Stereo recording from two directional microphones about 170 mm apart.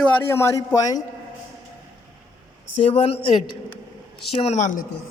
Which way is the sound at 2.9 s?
35° left (ahead or behind).